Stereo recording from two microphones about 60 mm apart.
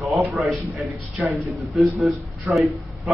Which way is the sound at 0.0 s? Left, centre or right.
Centre.